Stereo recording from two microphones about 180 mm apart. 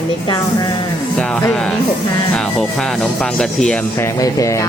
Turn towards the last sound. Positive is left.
turn(degrees=20)  # may be behind; listen again after turning